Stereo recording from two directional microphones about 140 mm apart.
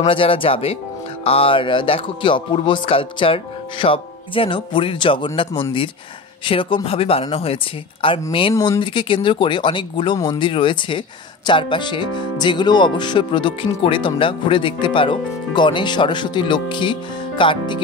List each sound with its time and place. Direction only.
0.0 s speech: 40° left (ahead or behind)